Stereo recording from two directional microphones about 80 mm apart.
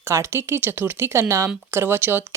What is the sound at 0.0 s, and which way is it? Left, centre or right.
A woman's voice, right.